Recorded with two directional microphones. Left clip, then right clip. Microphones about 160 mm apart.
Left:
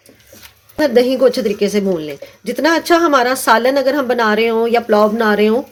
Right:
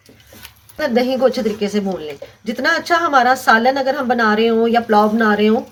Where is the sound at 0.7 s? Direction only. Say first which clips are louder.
Left 4 dB; 45° left (ahead or behind).